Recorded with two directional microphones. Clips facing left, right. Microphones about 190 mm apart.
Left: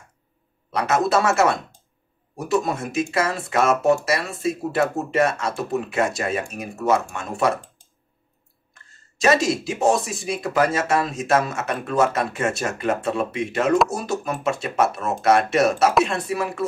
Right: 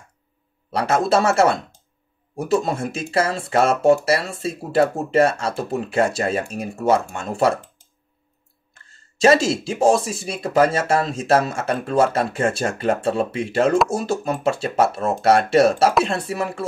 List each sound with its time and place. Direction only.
0.7 s speech: 30° right (ahead or behind)
9.2 s speech: 30° right (ahead or behind)